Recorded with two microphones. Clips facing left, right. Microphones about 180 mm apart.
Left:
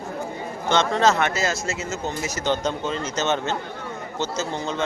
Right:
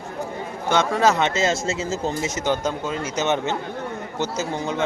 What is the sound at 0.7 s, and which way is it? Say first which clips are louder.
Speech: even; 10° right (ahead or behind).